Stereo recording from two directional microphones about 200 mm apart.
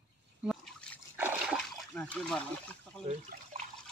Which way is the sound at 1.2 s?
10° right (ahead or behind).